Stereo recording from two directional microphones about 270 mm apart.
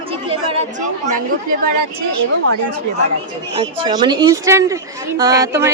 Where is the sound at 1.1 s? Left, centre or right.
Right.